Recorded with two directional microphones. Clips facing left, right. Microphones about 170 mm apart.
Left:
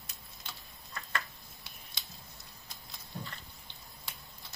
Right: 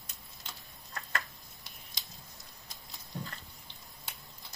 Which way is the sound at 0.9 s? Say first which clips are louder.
Even; 40° right (ahead or behind).